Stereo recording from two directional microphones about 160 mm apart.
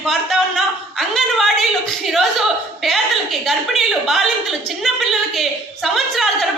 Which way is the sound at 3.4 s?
Centre (ahead or behind).